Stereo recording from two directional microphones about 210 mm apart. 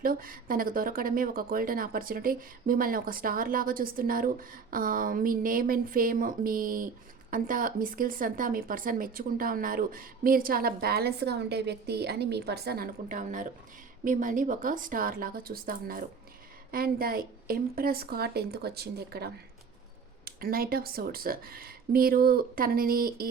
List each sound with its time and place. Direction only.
0.0 s a woman's voice: 45° right (ahead or behind)